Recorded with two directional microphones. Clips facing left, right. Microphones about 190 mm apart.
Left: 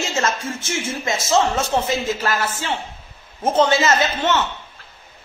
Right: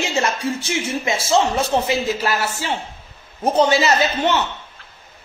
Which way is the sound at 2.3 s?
40° right (ahead or behind).